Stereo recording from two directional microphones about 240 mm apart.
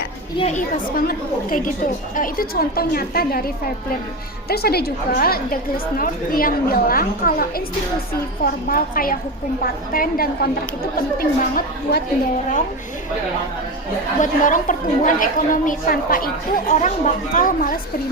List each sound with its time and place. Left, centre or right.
0.3 s speech: left
0.9 s a woman's voice: left
8.6 s a woman's voice: left
14.2 s a woman's voice: left